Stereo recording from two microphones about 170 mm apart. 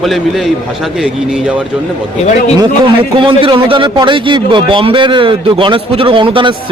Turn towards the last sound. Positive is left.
turn(degrees=-30)  # may be behind; listen again after turning